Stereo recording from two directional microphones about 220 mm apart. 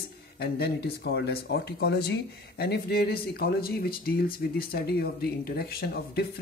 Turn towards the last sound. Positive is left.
turn(degrees=45)  # may be behind; listen again after turning